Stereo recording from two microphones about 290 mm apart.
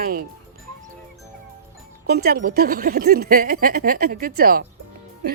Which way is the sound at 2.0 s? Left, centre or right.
Right.